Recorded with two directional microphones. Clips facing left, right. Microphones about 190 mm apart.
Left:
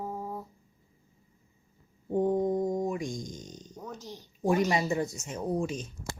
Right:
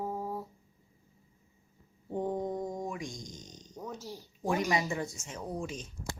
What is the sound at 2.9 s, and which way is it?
Speech, 50° left (ahead or behind).